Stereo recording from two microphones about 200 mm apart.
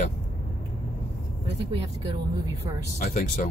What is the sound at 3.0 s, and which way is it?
Speech, 40° left (ahead or behind).